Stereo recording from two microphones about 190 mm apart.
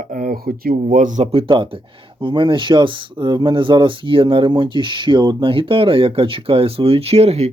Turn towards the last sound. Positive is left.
turn(degrees=-35)  # may be behind; listen again after turning